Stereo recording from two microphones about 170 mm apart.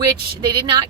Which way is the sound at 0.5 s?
25° right (ahead or behind).